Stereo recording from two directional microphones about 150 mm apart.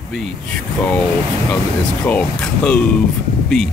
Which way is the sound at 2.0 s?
10° left (ahead or behind).